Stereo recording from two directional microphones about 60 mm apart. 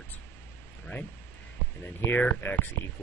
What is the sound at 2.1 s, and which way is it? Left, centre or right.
Speech, left.